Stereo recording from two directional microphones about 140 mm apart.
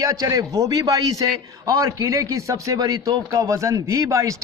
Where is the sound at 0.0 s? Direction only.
25° right (ahead or behind).